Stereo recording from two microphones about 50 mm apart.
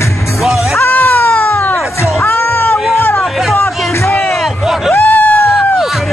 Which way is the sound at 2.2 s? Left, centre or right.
Left.